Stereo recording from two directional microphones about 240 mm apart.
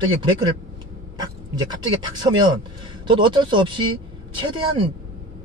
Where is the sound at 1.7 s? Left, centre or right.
Centre.